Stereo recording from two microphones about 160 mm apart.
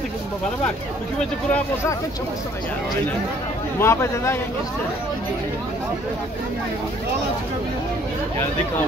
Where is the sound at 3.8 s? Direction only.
15° left (ahead or behind).